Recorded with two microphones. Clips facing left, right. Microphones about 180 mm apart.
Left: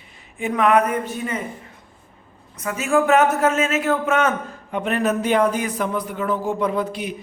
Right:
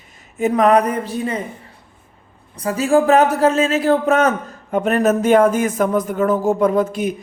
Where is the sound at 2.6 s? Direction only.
35° right (ahead or behind).